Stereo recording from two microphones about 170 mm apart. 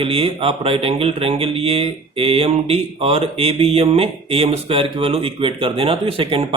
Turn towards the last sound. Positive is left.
turn(degrees=-30)  # may be behind; listen again after turning